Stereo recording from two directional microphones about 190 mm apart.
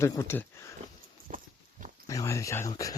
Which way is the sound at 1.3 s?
45° right (ahead or behind).